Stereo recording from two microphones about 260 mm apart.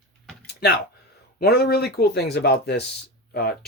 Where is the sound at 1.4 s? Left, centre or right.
Left.